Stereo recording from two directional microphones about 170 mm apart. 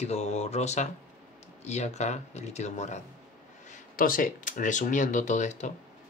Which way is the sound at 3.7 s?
55° left (ahead or behind).